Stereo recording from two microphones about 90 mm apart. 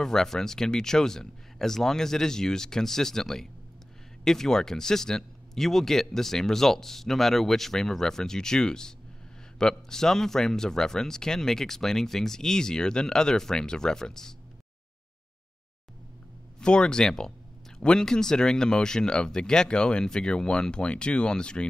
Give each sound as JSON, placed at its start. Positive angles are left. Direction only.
{"t": 0.0, "sound": "speech", "side_deg": 5}
{"t": 16.5, "sound": "speech", "side_deg": 10}